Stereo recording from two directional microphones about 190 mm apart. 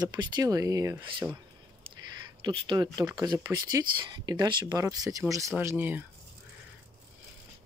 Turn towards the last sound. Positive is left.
turn(degrees=-10)  # may be behind; listen again after turning